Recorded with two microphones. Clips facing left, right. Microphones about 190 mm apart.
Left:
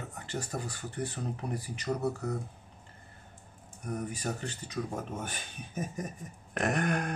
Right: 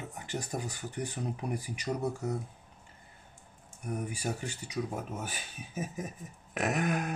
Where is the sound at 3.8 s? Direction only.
10° right (ahead or behind).